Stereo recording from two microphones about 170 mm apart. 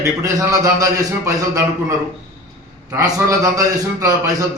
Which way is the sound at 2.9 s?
20° right (ahead or behind).